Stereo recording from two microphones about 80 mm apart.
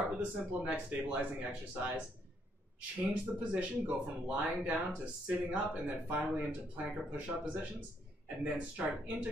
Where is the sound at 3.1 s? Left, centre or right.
Centre.